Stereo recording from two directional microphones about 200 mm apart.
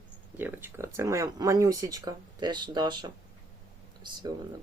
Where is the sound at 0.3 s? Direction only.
10° right (ahead or behind).